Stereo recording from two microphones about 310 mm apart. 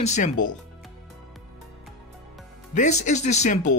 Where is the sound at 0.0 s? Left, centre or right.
Left.